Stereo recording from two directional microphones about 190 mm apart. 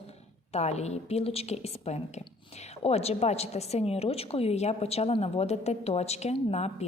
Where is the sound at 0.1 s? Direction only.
35° left (ahead or behind).